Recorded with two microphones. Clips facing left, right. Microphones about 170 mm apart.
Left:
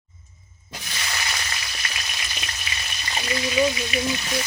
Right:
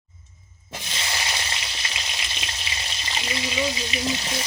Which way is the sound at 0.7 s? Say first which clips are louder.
Right 1 dB; 25° right (ahead or behind).